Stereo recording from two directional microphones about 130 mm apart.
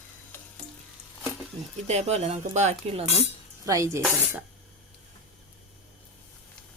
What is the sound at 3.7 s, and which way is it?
Speech, 20° right (ahead or behind).